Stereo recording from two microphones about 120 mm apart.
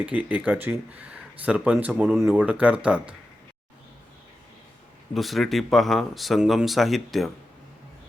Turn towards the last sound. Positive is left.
turn(degrees=0)  # may be behind; listen again after turning